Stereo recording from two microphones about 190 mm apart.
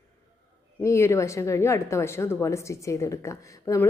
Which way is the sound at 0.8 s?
15° left (ahead or behind).